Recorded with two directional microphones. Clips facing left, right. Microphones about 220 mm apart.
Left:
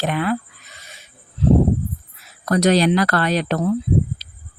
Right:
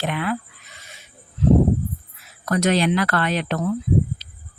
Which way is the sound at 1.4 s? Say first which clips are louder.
Left 1 dB; 35° left (ahead or behind).